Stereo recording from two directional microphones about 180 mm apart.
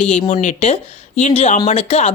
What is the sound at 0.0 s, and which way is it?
Speech, 40° left (ahead or behind).